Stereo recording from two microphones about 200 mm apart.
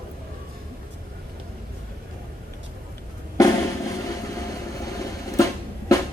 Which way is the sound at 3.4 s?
15° left (ahead or behind).